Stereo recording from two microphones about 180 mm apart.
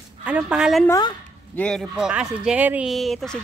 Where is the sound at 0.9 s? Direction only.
25° left (ahead or behind).